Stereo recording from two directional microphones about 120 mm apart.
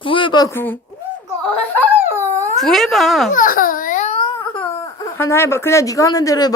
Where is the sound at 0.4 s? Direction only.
15° left (ahead or behind).